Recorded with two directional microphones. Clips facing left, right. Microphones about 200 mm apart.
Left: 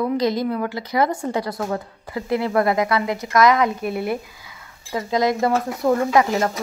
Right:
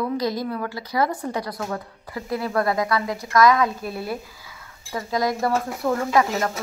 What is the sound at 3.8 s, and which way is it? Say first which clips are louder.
Speech: left 6 dB; 60° left (ahead or behind).